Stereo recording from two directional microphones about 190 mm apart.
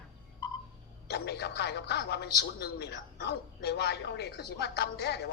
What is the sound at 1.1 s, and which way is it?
Speech, 60° left (ahead or behind).